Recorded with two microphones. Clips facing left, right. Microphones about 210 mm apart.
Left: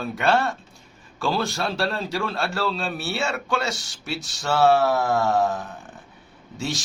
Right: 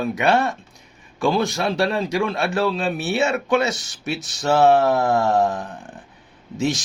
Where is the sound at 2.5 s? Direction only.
15° right (ahead or behind).